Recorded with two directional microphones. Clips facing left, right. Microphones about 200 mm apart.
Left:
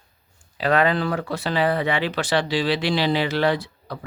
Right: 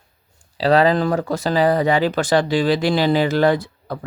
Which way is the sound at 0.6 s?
35° right (ahead or behind).